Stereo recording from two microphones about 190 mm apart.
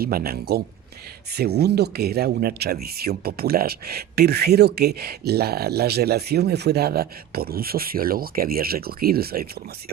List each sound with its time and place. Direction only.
0.0 s speech: 50° right (ahead or behind)